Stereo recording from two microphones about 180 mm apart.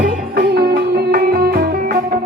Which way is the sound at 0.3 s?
60° right (ahead or behind).